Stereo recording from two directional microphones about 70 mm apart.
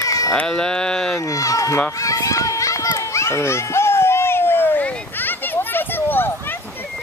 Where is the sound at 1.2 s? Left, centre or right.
Left.